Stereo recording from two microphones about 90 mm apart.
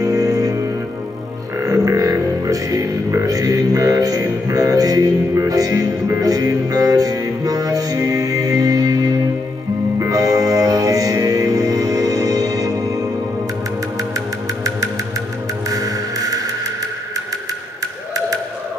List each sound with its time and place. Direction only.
0.0 s music: 40° right (ahead or behind)
14.1 s music: 40° right (ahead or behind)